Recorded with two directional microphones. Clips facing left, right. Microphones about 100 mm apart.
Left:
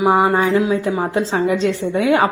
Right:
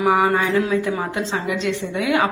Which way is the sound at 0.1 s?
25° left (ahead or behind).